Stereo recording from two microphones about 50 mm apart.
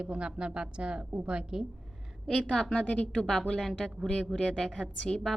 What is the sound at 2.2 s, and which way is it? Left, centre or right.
A woman's voice, centre.